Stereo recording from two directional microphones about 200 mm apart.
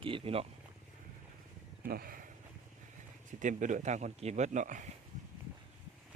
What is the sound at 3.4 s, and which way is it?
Speech, 40° right (ahead or behind).